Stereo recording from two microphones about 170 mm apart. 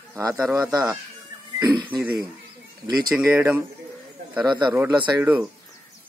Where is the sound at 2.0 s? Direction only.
10° right (ahead or behind).